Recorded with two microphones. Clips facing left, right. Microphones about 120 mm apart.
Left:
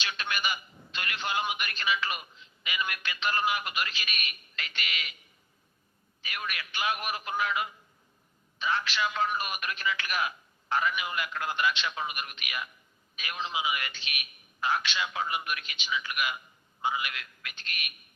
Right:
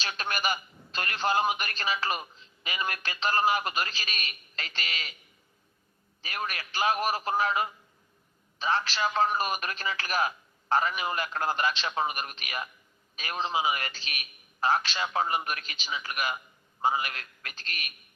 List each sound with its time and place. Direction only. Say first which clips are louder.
0.0 s a man's voice: right 2 dB; 40° right (ahead or behind)
6.2 s a man's voice: right 3 dB; 35° right (ahead or behind)